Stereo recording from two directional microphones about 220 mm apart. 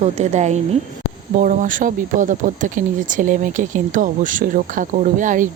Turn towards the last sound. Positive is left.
turn(degrees=-35)  # may be behind; listen again after turning